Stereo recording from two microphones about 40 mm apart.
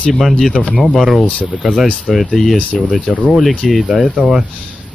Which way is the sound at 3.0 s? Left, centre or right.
Right.